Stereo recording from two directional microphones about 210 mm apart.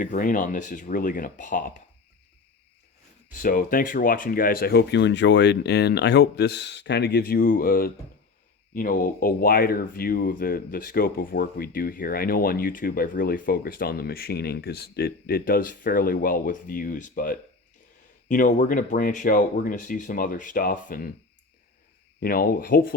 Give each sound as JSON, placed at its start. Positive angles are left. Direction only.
{"t": 0.0, "sound": "speech", "side_deg": 40}
{"t": 3.3, "sound": "speech", "side_deg": 40}
{"t": 22.2, "sound": "speech", "side_deg": 45}